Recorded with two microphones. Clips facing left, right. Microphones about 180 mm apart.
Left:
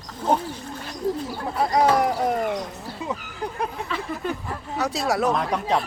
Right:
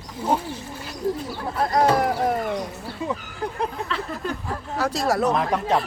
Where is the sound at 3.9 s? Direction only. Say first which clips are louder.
Even; 5° left (ahead or behind).